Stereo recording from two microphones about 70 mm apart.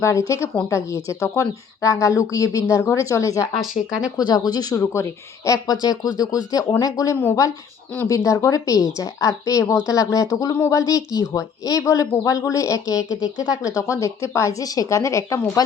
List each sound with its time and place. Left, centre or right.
0.0 s speech: left
4.2 s speech: left
4.7 s speech: left